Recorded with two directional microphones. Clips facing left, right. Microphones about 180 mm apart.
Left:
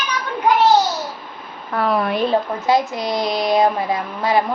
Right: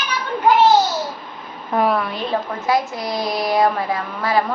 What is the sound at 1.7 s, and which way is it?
Speech, 20° right (ahead or behind).